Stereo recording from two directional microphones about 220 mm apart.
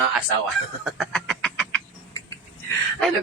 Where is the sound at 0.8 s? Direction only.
Centre (ahead or behind).